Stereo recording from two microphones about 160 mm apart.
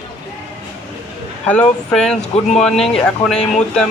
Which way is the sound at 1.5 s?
5° left (ahead or behind).